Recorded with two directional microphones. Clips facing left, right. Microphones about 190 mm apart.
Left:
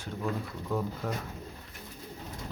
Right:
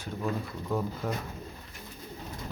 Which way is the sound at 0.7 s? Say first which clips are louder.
Right 1 dB; 5° right (ahead or behind).